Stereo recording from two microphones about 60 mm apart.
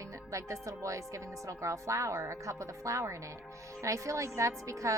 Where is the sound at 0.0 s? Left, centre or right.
Right.